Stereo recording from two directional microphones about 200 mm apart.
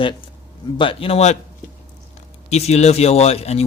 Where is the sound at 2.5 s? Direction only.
35° left (ahead or behind).